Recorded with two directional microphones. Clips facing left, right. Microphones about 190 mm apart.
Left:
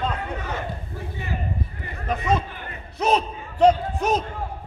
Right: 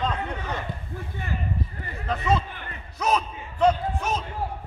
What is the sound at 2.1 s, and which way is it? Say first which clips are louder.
Speech: left 1 dB; 15° left (ahead or behind).